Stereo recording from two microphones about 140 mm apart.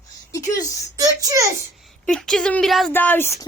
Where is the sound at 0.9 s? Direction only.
25° right (ahead or behind).